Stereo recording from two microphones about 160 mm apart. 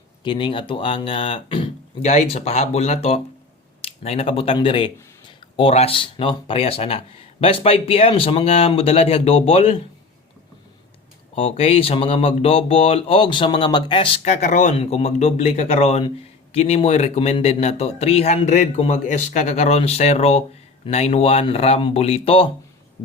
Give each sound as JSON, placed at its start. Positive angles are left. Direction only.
{"t": 0.3, "sound": "speech", "side_deg": 30}
{"t": 11.3, "sound": "speech", "side_deg": 40}
{"t": 14.2, "sound": "speech", "side_deg": 50}